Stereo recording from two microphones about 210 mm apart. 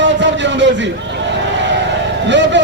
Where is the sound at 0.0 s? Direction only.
60° right (ahead or behind).